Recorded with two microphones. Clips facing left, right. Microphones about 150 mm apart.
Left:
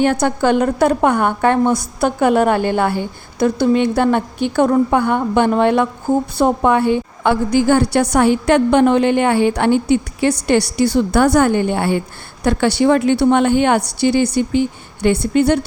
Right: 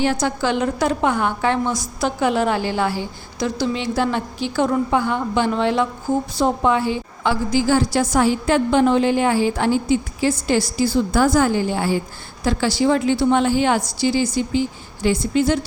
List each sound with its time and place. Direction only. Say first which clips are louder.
0.0 s a woman's voice: left 5 dB; 55° left (ahead or behind)